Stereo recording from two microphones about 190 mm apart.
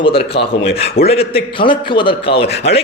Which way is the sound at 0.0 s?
30° left (ahead or behind).